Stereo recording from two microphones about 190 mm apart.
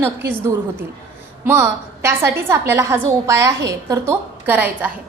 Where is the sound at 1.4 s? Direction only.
10° right (ahead or behind).